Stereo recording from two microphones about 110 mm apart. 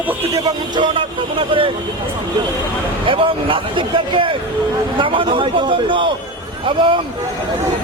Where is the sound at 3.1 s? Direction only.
55° right (ahead or behind).